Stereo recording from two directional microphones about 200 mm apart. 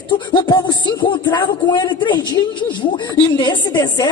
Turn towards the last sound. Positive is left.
turn(degrees=20)  # may be behind; listen again after turning